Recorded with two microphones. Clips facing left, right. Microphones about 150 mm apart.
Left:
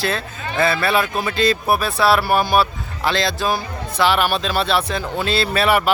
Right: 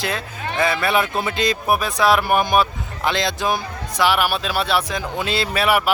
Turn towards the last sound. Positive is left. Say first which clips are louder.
# left 2 dB
turn(degrees=-10)  # may be behind; listen again after turning